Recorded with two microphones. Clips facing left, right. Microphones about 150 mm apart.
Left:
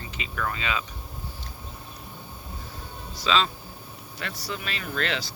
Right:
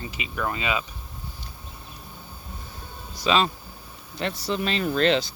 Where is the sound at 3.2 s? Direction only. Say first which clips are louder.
Right 3 dB; 15° right (ahead or behind).